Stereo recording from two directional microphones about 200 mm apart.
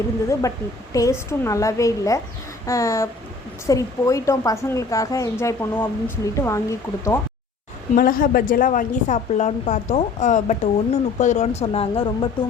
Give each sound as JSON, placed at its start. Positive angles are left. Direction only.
{"t": 0.9, "sound": "speech", "side_deg": 15}
{"t": 7.9, "sound": "speech", "side_deg": 45}